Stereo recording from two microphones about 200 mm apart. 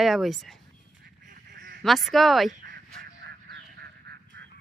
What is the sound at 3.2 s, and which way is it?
Goose, 55° right (ahead or behind).